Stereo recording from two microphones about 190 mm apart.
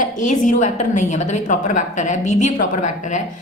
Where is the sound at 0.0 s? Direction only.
40° left (ahead or behind).